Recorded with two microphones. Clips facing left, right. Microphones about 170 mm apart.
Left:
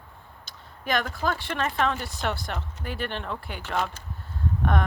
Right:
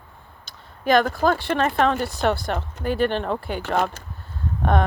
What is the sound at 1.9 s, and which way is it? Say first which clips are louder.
Speech: right 9 dB; 70° right (ahead or behind).